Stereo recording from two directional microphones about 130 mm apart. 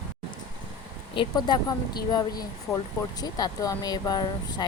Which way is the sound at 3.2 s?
30° left (ahead or behind).